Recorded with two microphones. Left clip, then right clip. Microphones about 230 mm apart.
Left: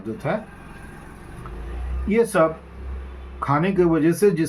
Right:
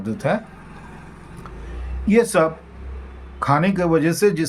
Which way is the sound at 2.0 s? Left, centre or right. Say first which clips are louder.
Right 2 dB; right.